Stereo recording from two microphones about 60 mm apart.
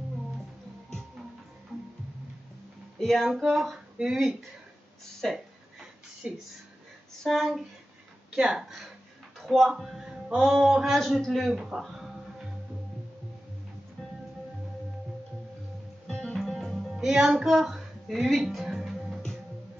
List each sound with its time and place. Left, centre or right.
3.0 s a man's voice: centre
5.2 s a man's voice: centre
6.2 s speech: centre
7.2 s a man's voice: centre
8.3 s speech: centre
11.0 s a man's voice: centre
11.5 s speech: centre
16.1 s music: centre
16.3 s music: centre
17.6 s speech: centre